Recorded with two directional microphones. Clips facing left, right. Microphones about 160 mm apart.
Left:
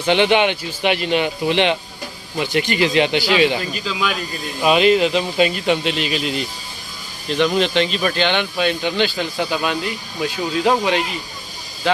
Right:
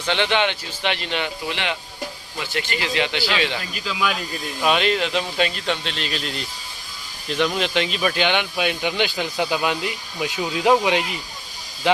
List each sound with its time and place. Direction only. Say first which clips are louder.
0.0 s speech: left 6 dB; 15° left (ahead or behind)
4.6 s speech: left 6 dB; 5° left (ahead or behind); by 11.0 s 15° right (ahead or behind)